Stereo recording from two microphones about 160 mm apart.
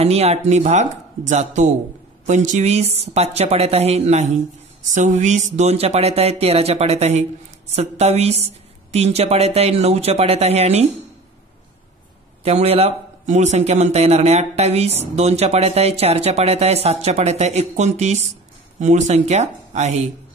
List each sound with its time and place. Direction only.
0.0 s a man's voice: 40° right (ahead or behind)
12.4 s a man's voice: 40° right (ahead or behind)